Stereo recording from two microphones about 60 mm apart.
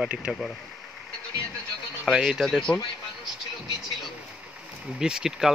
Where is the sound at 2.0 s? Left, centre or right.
Centre.